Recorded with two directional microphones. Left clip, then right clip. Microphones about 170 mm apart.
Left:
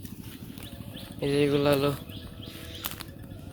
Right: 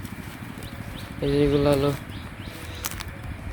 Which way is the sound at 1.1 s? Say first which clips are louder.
Right 3 dB; 5° right (ahead or behind).